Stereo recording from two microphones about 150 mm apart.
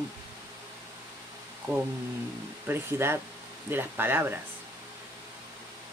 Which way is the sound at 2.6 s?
15° right (ahead or behind).